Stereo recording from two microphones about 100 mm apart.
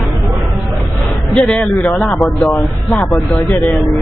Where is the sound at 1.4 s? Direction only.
10° left (ahead or behind).